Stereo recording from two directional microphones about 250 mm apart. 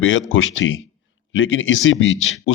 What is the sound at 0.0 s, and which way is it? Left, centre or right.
A man's voice, left.